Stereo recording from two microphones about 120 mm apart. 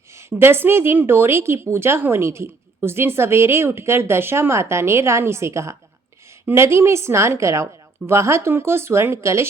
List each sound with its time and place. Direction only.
0.2 s a woman's voice: 20° right (ahead or behind)